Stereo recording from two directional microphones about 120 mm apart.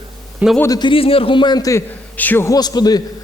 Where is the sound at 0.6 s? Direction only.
30° left (ahead or behind).